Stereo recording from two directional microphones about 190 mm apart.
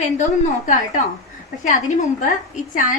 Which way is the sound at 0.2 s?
40° left (ahead or behind).